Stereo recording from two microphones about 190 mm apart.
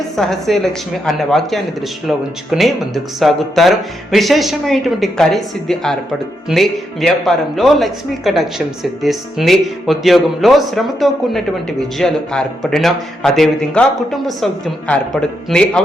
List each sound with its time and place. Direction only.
0.2 s speech: centre (ahead or behind)